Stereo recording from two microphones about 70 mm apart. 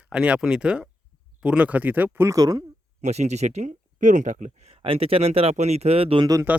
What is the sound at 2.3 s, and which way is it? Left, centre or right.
Speech, right.